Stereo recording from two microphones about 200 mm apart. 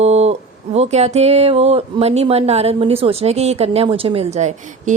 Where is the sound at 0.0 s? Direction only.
30° right (ahead or behind).